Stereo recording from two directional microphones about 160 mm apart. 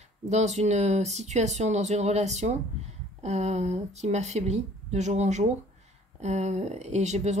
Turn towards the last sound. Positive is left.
turn(degrees=-45)  # may be behind; listen again after turning